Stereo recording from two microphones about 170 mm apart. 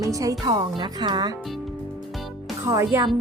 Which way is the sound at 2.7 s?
20° right (ahead or behind).